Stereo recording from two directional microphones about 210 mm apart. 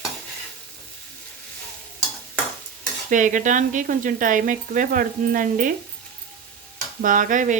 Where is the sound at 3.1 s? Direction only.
40° right (ahead or behind).